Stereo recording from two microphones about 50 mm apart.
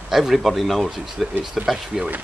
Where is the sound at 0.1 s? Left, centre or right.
Centre.